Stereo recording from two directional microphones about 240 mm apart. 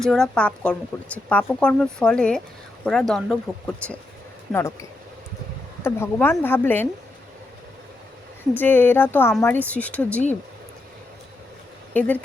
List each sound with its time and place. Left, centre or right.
0.1 s speech: centre
4.5 s speech: centre
8.5 s speech: centre
11.9 s speech: centre